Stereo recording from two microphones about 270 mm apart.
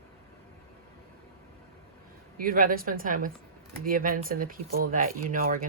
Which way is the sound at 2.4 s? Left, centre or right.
Right.